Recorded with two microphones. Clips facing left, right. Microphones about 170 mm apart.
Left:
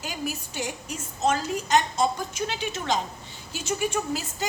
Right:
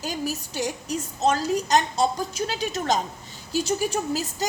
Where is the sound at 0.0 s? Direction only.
40° right (ahead or behind).